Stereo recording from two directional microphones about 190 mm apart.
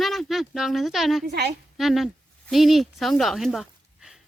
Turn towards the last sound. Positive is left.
turn(degrees=0)  # may be behind; listen again after turning